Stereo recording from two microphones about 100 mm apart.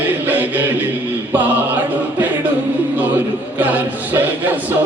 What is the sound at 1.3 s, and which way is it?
Chant, 15° right (ahead or behind).